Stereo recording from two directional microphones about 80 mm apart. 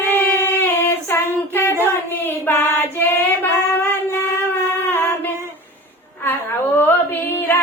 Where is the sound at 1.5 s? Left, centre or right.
Left.